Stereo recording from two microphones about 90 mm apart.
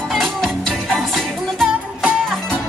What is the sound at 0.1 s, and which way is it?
Music, centre (ahead or behind).